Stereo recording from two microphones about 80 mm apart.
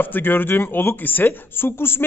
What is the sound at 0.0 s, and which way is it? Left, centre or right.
A man's voice, left.